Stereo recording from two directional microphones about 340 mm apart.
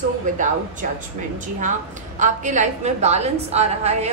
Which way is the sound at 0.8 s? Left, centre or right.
Right.